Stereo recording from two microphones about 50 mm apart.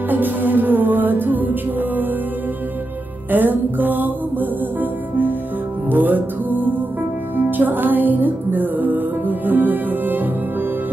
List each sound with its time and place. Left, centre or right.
0.1 s music: right
3.3 s music: right